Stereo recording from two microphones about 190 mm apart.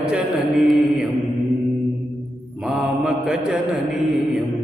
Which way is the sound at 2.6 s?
5° right (ahead or behind).